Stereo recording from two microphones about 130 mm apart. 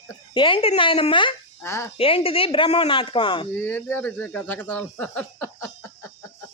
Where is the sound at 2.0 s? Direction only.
45° left (ahead or behind).